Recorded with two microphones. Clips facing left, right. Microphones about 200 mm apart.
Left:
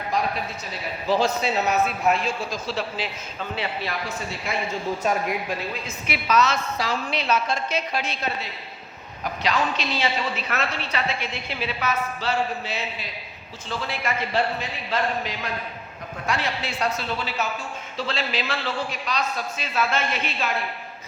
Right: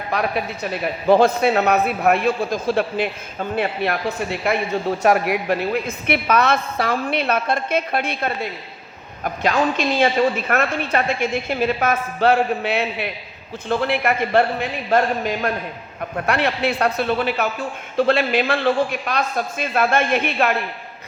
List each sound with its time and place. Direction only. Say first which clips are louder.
0.1 s a man's voice: right 4 dB; 65° right (ahead or behind)